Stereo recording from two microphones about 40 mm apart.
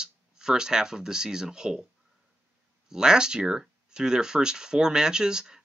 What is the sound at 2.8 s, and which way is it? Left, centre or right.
Speech, centre.